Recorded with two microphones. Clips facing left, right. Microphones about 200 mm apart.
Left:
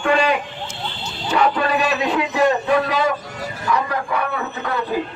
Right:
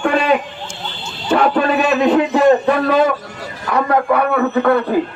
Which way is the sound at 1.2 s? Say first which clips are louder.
Right 4 dB; 55° right (ahead or behind).